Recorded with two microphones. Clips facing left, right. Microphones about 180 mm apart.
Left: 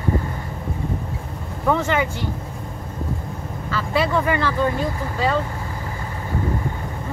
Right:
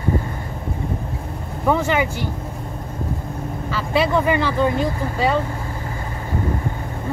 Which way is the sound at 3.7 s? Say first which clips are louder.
Right 2 dB; 15° right (ahead or behind).